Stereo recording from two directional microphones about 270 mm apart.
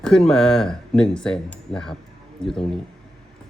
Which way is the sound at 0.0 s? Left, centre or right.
Centre.